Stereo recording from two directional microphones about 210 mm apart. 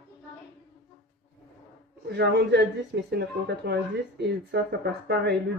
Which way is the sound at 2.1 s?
55° right (ahead or behind).